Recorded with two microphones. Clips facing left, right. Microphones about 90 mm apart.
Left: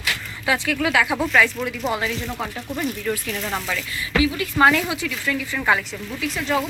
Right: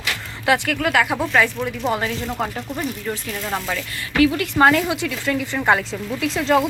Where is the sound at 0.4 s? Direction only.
60° right (ahead or behind).